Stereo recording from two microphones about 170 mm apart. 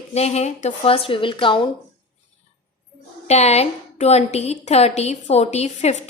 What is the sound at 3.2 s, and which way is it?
A woman's voice, 40° left (ahead or behind).